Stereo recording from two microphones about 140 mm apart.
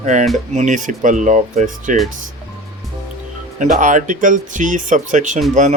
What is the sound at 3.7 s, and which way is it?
Speech, 65° right (ahead or behind).